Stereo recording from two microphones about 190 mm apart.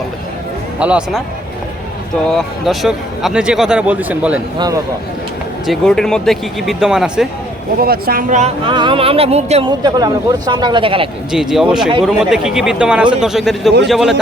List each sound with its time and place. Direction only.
0.8 s speech: 5° right (ahead or behind)
2.3 s speech: centre (ahead or behind)
4.5 s speech: 20° right (ahead or behind)
5.6 s speech: centre (ahead or behind)
7.8 s speech: 50° right (ahead or behind)
8.6 s speech: 25° right (ahead or behind)
9.8 s speech: 20° right (ahead or behind)
11.3 s speech: 5° right (ahead or behind)